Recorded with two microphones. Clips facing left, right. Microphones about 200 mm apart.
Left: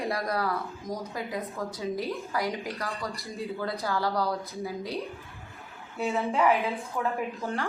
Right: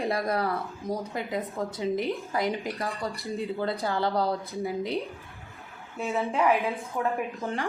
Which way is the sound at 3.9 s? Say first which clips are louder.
Right 1 dB; 25° right (ahead or behind).